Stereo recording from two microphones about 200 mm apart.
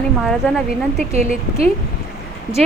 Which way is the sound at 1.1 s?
35° right (ahead or behind).